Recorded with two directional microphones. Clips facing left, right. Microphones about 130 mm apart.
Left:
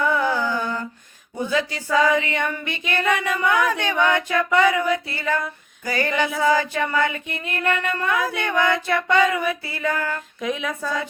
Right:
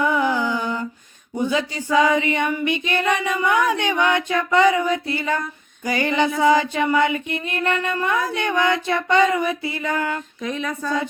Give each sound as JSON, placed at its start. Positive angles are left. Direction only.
{"t": 0.0, "sound": "mantra", "side_deg": -15}
{"t": 1.4, "sound": "a sound", "side_deg": -20}
{"t": 10.4, "sound": "speech", "side_deg": 0}